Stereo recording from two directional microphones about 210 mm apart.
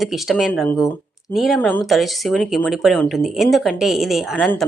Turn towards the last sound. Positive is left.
turn(degrees=0)  # may be behind; listen again after turning